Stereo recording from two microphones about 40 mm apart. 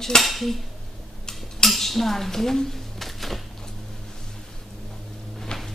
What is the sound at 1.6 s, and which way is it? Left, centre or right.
Dishes, centre.